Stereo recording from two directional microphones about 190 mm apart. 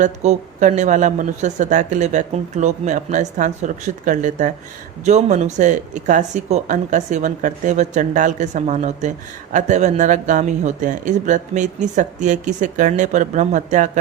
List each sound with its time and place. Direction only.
0.0 s speech: 40° right (ahead or behind)